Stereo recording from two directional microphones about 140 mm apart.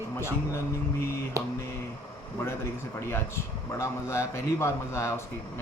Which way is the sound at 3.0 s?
20° left (ahead or behind).